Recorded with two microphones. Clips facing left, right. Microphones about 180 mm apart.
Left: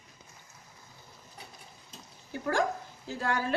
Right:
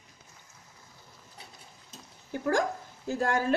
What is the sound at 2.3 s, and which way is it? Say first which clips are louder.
Speech: right 2 dB; 45° right (ahead or behind).